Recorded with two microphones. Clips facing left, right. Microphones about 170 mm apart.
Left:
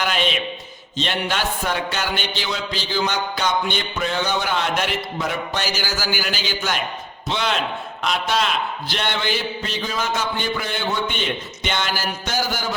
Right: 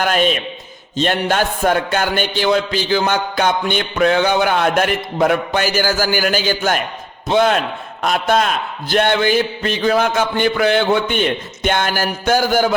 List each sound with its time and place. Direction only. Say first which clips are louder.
0.0 s a man's voice: right 6 dB; 45° right (ahead or behind); by 11.2 s 65° right (ahead or behind)
11.6 s a man's voice: right 7 dB; 50° right (ahead or behind)